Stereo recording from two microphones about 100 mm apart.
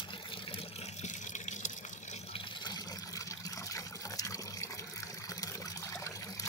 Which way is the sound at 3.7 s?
35° left (ahead or behind).